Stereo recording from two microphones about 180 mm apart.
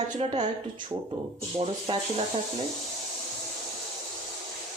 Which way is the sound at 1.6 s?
30° right (ahead or behind).